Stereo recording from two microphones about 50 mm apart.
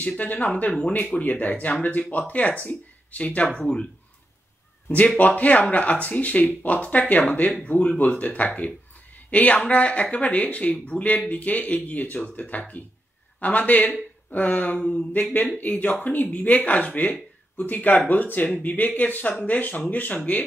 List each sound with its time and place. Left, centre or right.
0.2 s speech: left